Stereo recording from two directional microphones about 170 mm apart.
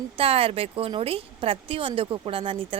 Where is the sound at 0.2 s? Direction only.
35° right (ahead or behind).